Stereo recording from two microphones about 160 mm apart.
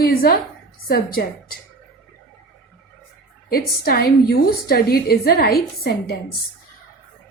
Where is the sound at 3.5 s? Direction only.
70° left (ahead or behind).